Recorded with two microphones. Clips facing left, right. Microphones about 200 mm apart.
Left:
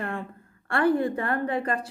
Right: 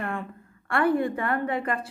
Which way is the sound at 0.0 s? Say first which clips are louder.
Even; 30° left (ahead or behind).